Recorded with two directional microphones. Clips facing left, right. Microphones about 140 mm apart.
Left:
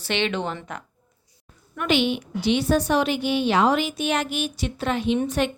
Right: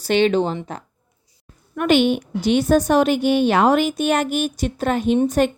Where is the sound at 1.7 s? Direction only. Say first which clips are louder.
Right 6 dB; 50° right (ahead or behind).